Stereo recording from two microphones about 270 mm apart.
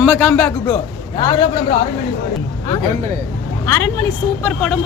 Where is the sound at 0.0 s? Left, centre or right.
Centre.